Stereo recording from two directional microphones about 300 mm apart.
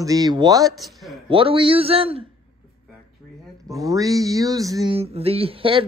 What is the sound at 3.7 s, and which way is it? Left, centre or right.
Speech, centre.